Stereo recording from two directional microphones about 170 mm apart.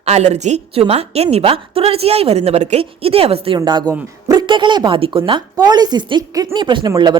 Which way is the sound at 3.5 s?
25° right (ahead or behind).